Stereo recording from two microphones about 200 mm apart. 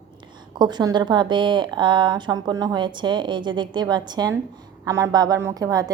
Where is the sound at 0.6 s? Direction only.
20° right (ahead or behind).